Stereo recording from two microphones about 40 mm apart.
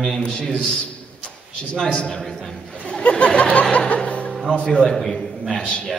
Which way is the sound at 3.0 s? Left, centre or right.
Left.